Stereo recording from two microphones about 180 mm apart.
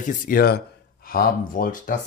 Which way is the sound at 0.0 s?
50° left (ahead or behind).